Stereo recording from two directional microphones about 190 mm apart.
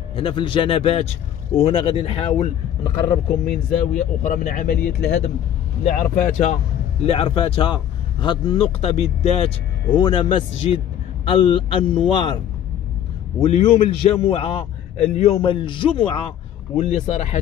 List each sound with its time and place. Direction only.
0.1 s a man's voice: 25° left (ahead or behind); by 4.7 s 45° left (ahead or behind)
5.9 s a man's voice: 40° left (ahead or behind); by 12.4 s 25° left (ahead or behind)
13.4 s a man's voice: 30° left (ahead or behind)